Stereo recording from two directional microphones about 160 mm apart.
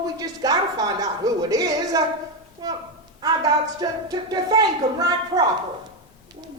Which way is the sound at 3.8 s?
25° right (ahead or behind).